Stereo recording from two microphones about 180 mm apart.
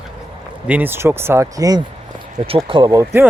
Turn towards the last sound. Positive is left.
turn(degrees=-20)  # may be behind; listen again after turning